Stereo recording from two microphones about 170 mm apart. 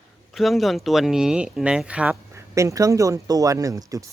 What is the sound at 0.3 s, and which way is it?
Speech, centre (ahead or behind).